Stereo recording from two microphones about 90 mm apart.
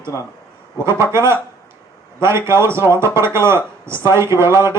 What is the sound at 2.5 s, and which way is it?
Speech, 30° right (ahead or behind).